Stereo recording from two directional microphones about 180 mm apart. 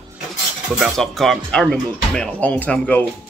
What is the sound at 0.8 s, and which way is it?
Speech, centre (ahead or behind).